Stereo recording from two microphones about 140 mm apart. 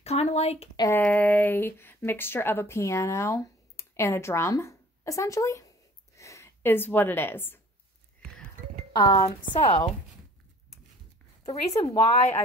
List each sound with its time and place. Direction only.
0.0 s speech: 50° left (ahead or behind)
0.9 s speech: 10° left (ahead or behind)
8.9 s a woman's voice: 30° left (ahead or behind)
11.4 s speech: 50° left (ahead or behind)